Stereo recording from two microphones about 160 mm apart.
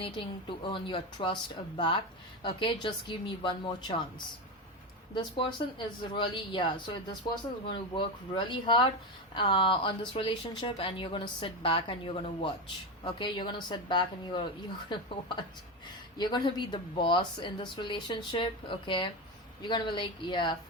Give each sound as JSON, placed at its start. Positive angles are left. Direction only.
{"t": 0.0, "sound": "speech", "side_deg": 30}
{"t": 5.1, "sound": "speech", "side_deg": 30}